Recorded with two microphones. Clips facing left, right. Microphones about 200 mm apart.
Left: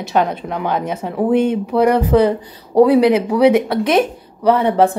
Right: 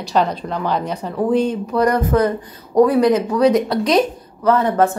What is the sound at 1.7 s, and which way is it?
Speech, 10° left (ahead or behind).